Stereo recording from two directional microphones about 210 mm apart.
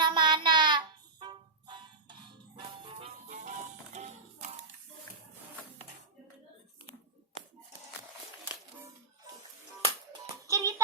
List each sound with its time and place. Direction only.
0.0 s child singing: 20° right (ahead or behind)
1.2 s music: 20° right (ahead or behind)
3.2 s music: 35° right (ahead or behind)
10.4 s music: 15° right (ahead or behind)